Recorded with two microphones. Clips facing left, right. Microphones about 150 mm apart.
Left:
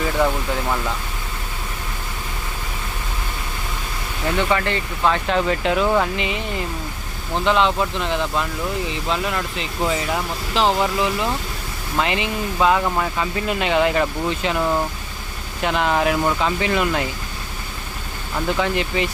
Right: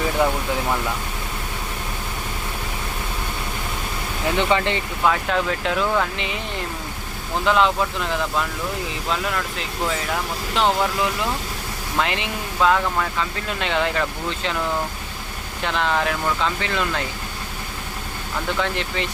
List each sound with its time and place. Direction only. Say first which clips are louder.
4.4 s speech: even; 20° right (ahead or behind)
5.0 s speech: left 2 dB; centre (ahead or behind)
12.8 s speech: left 2 dB; 20° left (ahead or behind)
13.6 s speech: left 4 dB; 5° left (ahead or behind)
15.6 s speech: left 3 dB; 10° left (ahead or behind)
18.6 s speech: left 4 dB; 5° left (ahead or behind)